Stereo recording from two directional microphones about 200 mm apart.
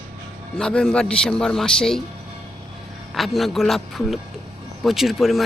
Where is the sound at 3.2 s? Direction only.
Centre (ahead or behind).